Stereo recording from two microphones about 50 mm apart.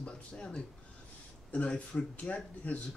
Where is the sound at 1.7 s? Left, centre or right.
Left.